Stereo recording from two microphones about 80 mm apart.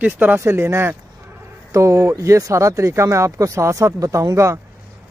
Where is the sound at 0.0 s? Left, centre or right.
Centre.